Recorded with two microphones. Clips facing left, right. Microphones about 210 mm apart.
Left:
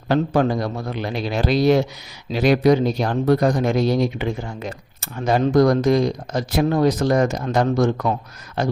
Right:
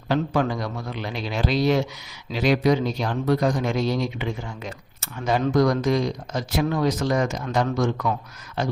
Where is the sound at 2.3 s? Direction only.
50° left (ahead or behind).